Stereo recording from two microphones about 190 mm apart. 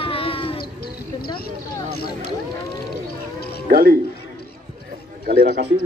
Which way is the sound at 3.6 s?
50° right (ahead or behind).